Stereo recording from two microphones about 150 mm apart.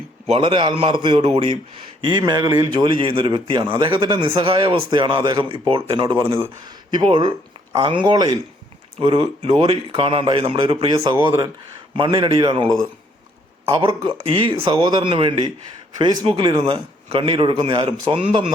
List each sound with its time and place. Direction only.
0.3 s a man's voice: 35° right (ahead or behind)
9.0 s a man's voice: 40° right (ahead or behind)
13.8 s a man's voice: 35° right (ahead or behind)